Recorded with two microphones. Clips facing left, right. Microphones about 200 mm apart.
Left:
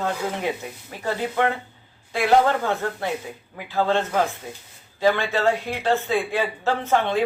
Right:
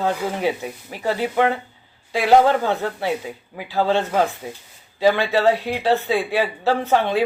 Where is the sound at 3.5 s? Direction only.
15° right (ahead or behind).